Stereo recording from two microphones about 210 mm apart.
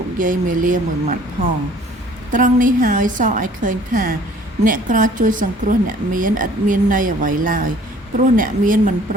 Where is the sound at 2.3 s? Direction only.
40° right (ahead or behind).